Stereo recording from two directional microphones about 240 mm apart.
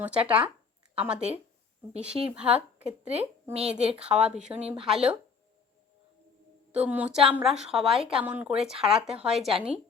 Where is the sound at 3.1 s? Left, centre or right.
Right.